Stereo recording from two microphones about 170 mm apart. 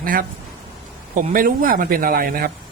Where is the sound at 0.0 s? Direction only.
55° right (ahead or behind).